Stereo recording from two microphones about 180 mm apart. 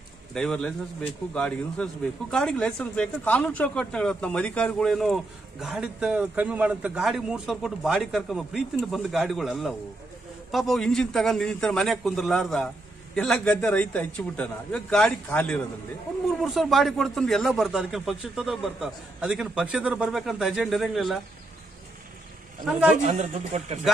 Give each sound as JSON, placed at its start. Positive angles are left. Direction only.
{"t": 0.3, "sound": "speech", "side_deg": 5}
{"t": 23.0, "sound": "speech", "side_deg": -40}